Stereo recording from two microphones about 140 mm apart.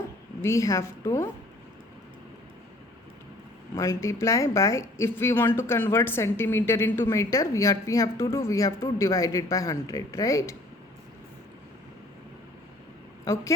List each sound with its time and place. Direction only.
0.4 s speech: 20° left (ahead or behind)
3.8 s speech: 20° left (ahead or behind)
13.2 s a woman's voice: 20° left (ahead or behind)